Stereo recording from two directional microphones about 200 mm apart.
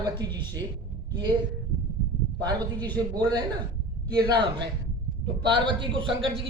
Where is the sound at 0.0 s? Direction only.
20° right (ahead or behind).